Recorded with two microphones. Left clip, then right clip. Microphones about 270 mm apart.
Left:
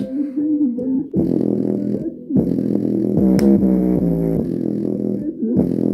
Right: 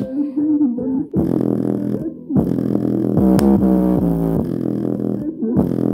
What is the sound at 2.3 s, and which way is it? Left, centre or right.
Music, right.